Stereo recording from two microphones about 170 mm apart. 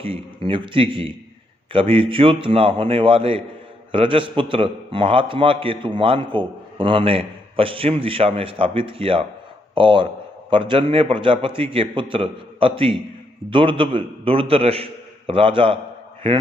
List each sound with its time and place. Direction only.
0.0 s a man's voice: 30° right (ahead or behind)